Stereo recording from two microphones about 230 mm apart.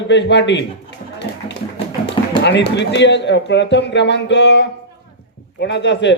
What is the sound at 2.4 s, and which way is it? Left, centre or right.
Speech, left.